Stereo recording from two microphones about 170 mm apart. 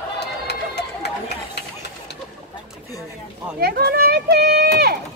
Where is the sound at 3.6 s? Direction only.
70° right (ahead or behind).